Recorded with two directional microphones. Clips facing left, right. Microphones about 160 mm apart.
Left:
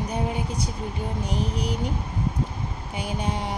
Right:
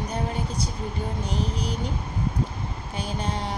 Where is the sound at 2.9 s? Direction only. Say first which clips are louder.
Left 1 dB; 15° left (ahead or behind).